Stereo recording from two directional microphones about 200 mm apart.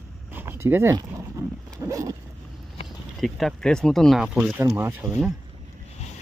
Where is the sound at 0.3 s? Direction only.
10° right (ahead or behind).